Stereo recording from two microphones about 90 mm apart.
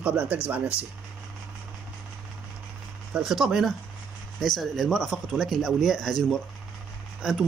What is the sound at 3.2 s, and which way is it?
Speech, 5° right (ahead or behind).